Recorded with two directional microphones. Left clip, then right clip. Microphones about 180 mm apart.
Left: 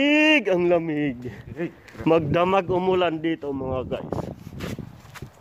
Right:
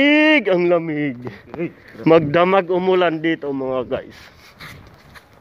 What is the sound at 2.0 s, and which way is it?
Speech, centre (ahead or behind).